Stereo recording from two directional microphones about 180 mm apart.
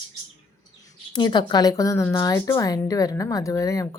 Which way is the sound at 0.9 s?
25° left (ahead or behind).